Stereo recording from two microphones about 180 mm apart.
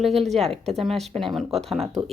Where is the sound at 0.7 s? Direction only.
Centre (ahead or behind).